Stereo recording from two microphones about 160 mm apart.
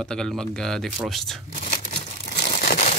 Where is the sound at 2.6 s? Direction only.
50° left (ahead or behind).